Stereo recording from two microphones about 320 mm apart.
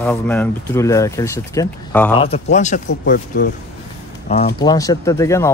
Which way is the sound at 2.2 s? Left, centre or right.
Left.